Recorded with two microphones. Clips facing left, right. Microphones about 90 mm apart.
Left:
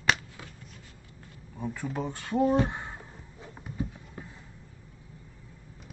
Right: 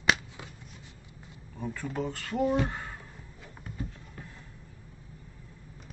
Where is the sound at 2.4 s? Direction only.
35° left (ahead or behind).